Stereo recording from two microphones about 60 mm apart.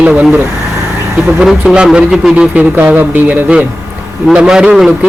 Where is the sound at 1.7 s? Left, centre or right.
Centre.